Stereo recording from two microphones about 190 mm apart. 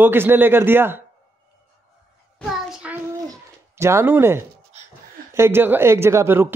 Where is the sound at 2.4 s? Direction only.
5° right (ahead or behind).